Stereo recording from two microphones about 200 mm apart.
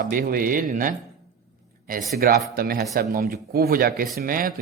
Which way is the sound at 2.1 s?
50° right (ahead or behind).